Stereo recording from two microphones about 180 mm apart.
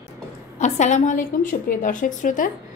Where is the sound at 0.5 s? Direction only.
40° left (ahead or behind).